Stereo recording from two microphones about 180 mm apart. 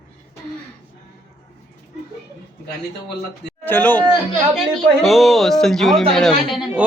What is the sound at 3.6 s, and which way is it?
A man's voice, 10° left (ahead or behind).